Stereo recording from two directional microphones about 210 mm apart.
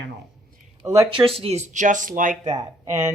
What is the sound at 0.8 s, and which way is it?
Speech, 15° right (ahead or behind).